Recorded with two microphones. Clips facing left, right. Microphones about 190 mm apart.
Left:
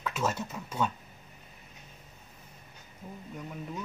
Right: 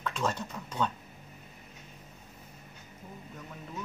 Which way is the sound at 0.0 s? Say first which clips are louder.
Left 1 dB; 5° left (ahead or behind).